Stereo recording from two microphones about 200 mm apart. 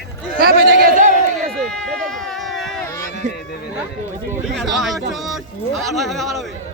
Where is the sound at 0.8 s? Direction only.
45° right (ahead or behind).